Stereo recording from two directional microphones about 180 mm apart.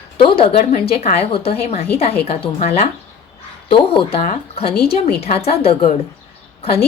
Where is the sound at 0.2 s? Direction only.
30° left (ahead or behind).